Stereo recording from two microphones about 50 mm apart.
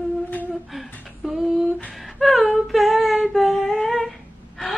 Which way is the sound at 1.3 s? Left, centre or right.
Centre.